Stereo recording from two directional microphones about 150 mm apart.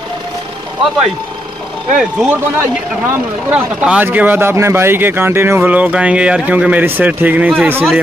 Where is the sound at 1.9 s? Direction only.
5° right (ahead or behind).